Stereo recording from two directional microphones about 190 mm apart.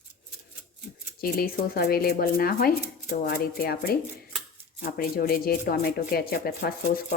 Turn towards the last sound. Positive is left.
turn(degrees=50)  # may be behind; listen again after turning